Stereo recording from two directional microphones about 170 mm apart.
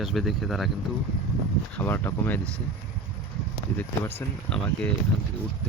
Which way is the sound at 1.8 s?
10° left (ahead or behind).